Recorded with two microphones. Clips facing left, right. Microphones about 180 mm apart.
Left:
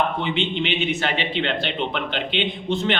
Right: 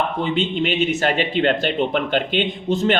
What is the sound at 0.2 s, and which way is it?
A man's voice, 45° right (ahead or behind).